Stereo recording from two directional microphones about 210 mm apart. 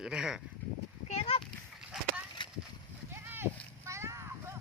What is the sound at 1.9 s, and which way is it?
Horse, 5° right (ahead or behind).